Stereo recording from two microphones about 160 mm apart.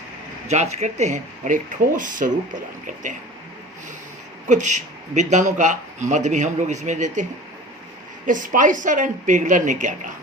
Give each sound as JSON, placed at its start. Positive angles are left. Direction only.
{"t": 0.4, "sound": "speech", "side_deg": -45}
{"t": 4.4, "sound": "speech", "side_deg": -50}
{"t": 8.3, "sound": "speech", "side_deg": -55}